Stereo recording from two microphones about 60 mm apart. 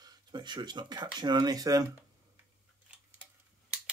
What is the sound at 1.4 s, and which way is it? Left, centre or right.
Speech, right.